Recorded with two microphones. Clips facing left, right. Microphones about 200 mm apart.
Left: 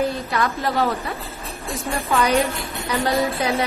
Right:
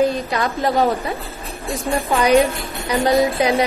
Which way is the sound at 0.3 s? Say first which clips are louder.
Right 3 dB; 15° right (ahead or behind).